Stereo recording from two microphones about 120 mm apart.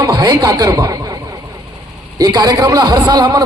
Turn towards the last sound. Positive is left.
turn(degrees=-35)  # may be behind; listen again after turning